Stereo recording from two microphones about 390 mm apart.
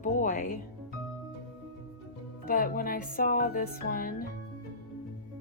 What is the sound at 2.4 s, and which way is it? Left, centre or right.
Music, left.